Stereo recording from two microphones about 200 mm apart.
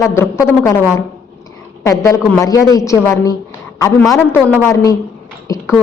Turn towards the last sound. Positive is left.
turn(degrees=10)  # may be behind; listen again after turning